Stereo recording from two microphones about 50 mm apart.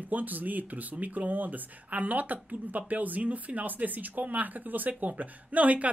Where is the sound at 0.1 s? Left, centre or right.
Right.